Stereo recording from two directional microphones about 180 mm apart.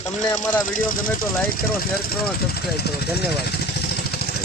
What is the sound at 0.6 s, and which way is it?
Speech, 50° left (ahead or behind).